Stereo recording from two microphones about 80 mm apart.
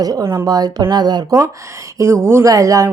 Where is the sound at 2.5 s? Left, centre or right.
Right.